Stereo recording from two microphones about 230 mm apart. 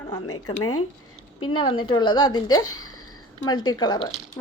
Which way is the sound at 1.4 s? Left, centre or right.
Left.